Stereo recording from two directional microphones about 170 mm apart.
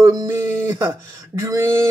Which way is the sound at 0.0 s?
20° right (ahead or behind).